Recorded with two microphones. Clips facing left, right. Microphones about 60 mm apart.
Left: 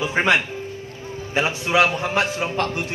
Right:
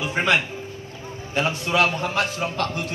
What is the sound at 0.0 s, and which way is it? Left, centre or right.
A man's voice, left.